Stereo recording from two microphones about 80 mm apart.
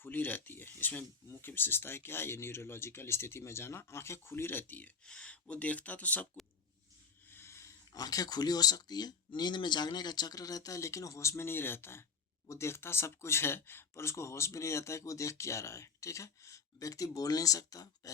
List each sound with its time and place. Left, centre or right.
0.0 s speech: left
5.0 s speech: centre
7.3 s a sound: left
7.9 s speech: left